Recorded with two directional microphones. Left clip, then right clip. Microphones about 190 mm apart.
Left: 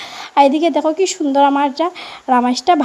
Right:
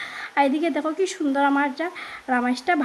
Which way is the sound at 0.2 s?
25° left (ahead or behind).